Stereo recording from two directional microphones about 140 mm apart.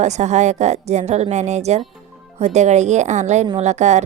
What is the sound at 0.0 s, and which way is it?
Speech, 55° right (ahead or behind).